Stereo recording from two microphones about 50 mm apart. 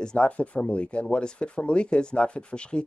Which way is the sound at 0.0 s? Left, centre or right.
Centre.